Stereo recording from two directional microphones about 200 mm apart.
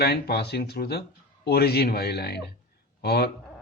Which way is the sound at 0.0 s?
55° left (ahead or behind).